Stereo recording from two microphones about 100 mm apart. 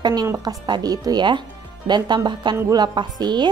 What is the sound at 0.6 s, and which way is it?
A woman's voice, 45° right (ahead or behind).